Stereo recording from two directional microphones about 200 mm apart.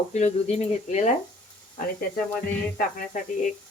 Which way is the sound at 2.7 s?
40° left (ahead or behind).